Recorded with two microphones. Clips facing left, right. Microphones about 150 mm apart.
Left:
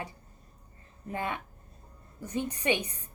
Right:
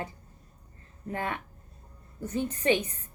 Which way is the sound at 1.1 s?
15° left (ahead or behind).